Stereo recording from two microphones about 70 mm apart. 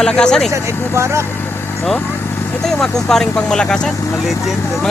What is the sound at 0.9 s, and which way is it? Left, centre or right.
Speech, right.